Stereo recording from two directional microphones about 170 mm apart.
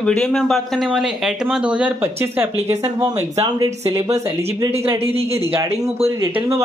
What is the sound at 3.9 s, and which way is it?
Speech, 15° right (ahead or behind).